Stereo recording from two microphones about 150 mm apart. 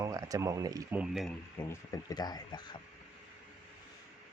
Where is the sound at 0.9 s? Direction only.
5° right (ahead or behind).